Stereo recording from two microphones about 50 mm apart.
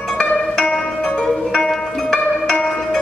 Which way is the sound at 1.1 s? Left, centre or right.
Centre.